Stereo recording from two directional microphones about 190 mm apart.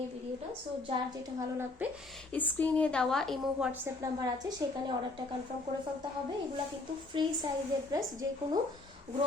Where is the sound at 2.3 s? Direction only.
10° left (ahead or behind).